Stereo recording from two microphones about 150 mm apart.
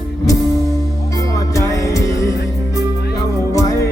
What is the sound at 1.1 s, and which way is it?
Music, 20° left (ahead or behind).